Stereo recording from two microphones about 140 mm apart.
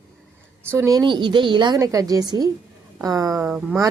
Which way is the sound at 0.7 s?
20° right (ahead or behind).